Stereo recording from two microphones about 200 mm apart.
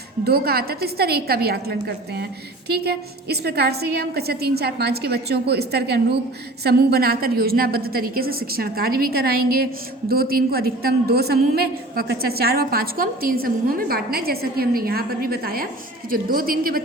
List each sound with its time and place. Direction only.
0.3 s a woman's voice: 50° right (ahead or behind)